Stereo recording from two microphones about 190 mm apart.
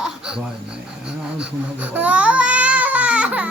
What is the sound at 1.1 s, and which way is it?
Baby cry, 5° right (ahead or behind).